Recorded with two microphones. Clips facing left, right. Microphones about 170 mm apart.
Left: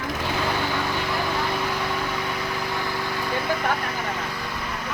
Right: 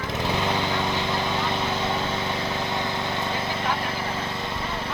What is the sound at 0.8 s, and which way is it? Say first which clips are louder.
Vehicle: even; 20° right (ahead or behind).